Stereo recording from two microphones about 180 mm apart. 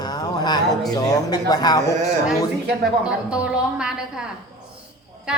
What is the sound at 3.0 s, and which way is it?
Speech, 5° right (ahead or behind).